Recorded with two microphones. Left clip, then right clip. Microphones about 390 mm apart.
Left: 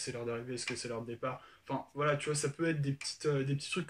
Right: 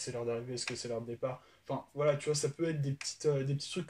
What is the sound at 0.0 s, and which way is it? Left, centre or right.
Speech, centre.